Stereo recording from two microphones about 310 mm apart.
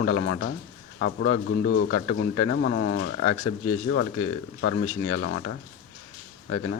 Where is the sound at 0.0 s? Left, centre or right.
Left.